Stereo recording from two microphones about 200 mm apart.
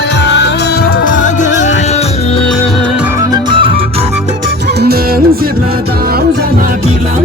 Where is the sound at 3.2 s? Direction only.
25° right (ahead or behind).